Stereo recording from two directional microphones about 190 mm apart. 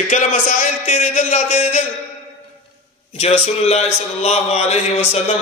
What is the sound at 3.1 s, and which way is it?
A man's voice, 35° left (ahead or behind).